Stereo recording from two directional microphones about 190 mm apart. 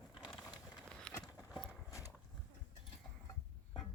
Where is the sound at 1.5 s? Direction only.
5° right (ahead or behind).